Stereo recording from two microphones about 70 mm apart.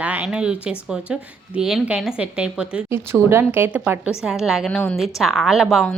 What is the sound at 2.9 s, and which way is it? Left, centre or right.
A woman's voice, right.